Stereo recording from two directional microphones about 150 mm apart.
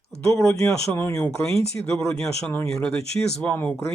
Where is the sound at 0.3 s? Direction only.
20° left (ahead or behind).